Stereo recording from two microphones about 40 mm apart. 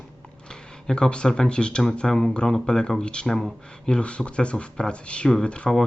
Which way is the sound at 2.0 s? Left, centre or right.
Centre.